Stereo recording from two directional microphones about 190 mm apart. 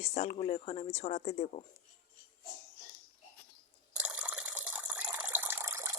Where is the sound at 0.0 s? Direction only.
35° left (ahead or behind).